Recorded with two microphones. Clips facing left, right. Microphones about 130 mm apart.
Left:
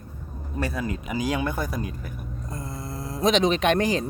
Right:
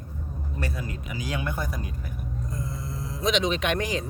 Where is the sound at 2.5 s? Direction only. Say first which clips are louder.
Left 2 dB; 75° left (ahead or behind).